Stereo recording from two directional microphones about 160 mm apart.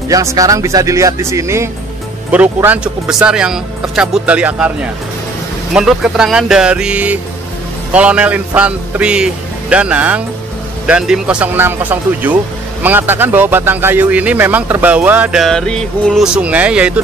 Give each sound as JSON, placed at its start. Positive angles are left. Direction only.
{"t": 0.1, "sound": "speech", "side_deg": -20}
{"t": 15.4, "sound": "speech", "side_deg": 5}